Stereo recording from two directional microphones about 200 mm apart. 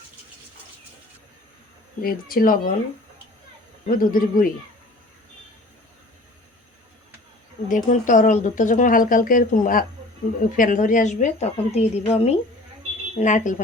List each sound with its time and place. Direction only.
2.0 s speech: 45° left (ahead or behind)
3.8 s speech: 45° left (ahead or behind)
7.7 s speech: 40° left (ahead or behind)